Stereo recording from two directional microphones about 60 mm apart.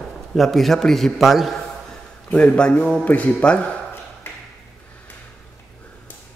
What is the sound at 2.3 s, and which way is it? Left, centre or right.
A man's voice, centre.